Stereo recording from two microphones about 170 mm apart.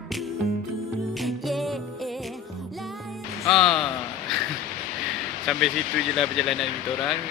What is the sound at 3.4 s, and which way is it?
Speech, centre (ahead or behind).